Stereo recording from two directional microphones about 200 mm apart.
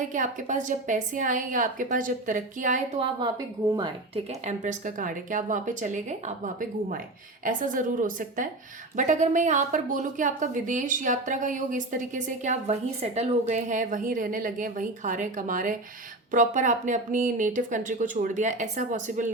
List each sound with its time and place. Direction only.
0.1 s a woman's voice: 40° right (ahead or behind)
3.2 s a woman's voice: 20° right (ahead or behind); by 19.3 s 40° right (ahead or behind)